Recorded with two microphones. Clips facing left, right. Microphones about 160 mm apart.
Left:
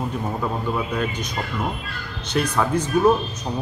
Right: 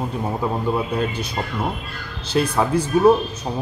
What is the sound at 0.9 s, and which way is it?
A man's voice, 30° right (ahead or behind).